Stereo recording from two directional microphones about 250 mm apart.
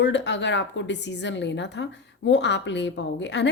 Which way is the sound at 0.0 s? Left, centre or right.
Left.